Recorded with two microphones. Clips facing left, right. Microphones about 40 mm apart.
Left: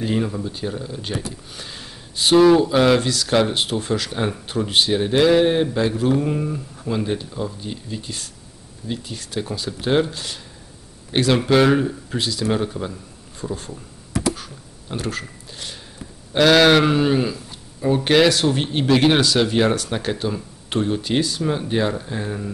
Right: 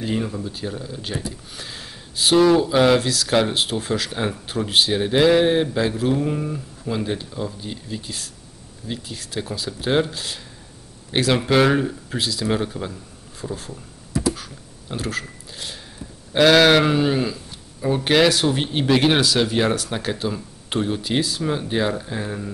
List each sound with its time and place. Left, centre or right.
0.0 s speech: centre
14.3 s a sound: centre
16.3 s speech: centre